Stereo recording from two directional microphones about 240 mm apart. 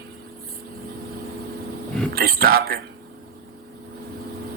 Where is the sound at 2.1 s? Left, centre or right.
Right.